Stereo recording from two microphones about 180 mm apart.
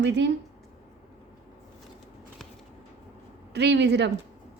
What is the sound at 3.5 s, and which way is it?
Speech, 75° right (ahead or behind).